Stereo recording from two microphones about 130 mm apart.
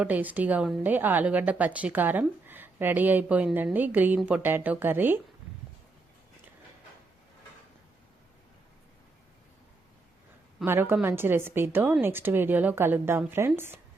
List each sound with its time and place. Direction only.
0.0 s a woman's voice: 10° right (ahead or behind)
10.7 s a woman's voice: 15° right (ahead or behind)